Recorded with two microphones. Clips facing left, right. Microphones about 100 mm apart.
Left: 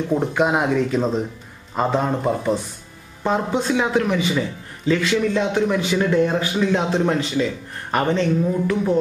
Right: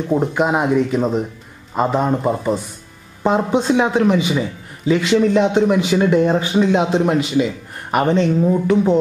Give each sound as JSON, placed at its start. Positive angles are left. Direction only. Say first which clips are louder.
{"t": 0.1, "sound": "speech", "louder": "right 3 dB", "side_deg": -5}
{"t": 3.3, "sound": "a man's voice", "louder": "right 4 dB", "side_deg": -20}